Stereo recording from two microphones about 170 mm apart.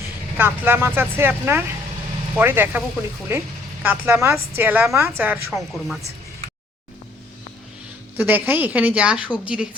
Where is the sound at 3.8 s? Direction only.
10° right (ahead or behind).